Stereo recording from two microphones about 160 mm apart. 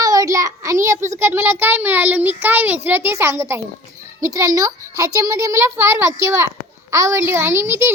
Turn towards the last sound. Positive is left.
turn(degrees=-15)  # may be behind; listen again after turning